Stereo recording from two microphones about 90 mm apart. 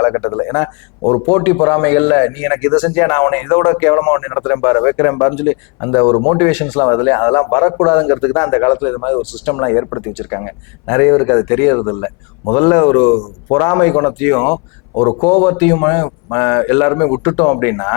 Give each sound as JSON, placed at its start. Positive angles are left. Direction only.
{"t": 0.0, "sound": "a man's voice", "side_deg": 25}
{"t": 1.3, "sound": "a man's voice", "side_deg": 20}
{"t": 6.4, "sound": "a man's voice", "side_deg": 15}
{"t": 9.2, "sound": "speech", "side_deg": 10}
{"t": 9.5, "sound": "a man's voice", "side_deg": 25}
{"t": 14.9, "sound": "a man's voice", "side_deg": 30}
{"t": 15.3, "sound": "a man's voice", "side_deg": 20}